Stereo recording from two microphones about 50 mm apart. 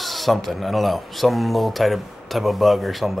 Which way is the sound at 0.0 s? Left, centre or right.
Centre.